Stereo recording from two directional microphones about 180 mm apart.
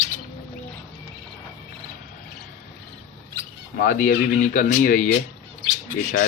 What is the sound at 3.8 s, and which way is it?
Speech, 50° left (ahead or behind).